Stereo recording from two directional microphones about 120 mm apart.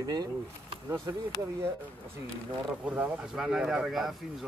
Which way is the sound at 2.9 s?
5° right (ahead or behind).